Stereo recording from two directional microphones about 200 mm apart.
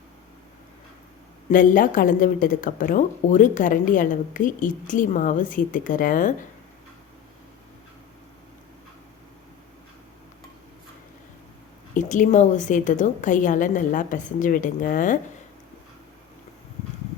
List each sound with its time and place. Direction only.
1.5 s a woman's voice: 40° left (ahead or behind)
11.9 s a woman's voice: 40° left (ahead or behind)